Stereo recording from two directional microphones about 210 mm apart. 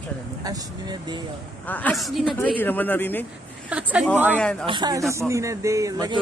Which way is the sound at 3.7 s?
5° right (ahead or behind).